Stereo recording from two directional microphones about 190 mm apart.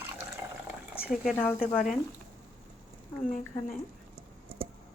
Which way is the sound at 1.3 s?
10° left (ahead or behind).